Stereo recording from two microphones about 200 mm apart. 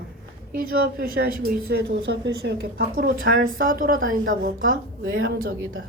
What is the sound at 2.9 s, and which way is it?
A woman's voice, 45° right (ahead or behind).